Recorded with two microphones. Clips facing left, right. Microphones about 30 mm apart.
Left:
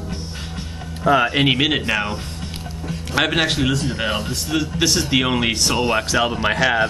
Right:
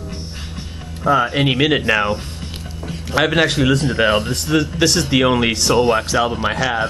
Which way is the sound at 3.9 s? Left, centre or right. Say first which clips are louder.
Right 7 dB; centre.